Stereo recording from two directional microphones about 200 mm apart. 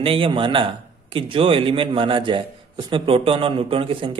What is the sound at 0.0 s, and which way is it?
A man's voice, 25° right (ahead or behind).